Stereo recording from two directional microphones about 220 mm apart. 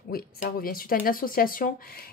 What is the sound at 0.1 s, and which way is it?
Speech, 40° left (ahead or behind).